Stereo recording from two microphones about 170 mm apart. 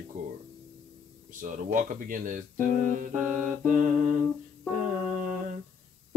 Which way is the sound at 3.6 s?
50° right (ahead or behind).